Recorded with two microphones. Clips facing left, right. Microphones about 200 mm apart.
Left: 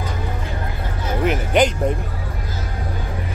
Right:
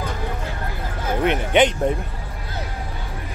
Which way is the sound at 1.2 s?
Centre (ahead or behind).